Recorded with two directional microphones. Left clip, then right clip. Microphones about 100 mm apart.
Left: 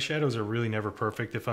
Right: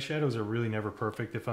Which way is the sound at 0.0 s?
20° left (ahead or behind).